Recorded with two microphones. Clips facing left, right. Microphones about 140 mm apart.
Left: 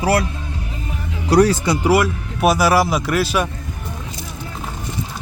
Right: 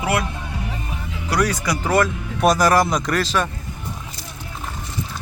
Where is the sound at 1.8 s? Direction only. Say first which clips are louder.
Left 2 dB; 10° left (ahead or behind).